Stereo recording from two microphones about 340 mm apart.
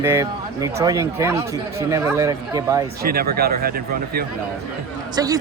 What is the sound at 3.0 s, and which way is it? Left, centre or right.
A man's voice, right.